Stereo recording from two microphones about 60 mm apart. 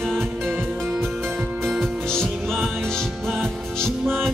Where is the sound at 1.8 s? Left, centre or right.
Centre.